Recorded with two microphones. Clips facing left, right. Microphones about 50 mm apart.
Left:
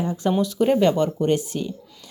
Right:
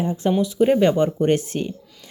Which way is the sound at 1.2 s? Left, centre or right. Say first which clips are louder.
Right 2 dB; right.